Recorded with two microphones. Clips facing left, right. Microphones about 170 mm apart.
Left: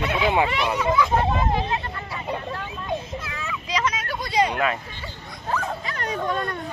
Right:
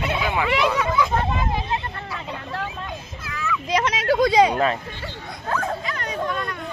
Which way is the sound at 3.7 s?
65° right (ahead or behind).